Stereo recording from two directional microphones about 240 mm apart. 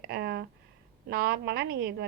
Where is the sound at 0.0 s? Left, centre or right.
Right.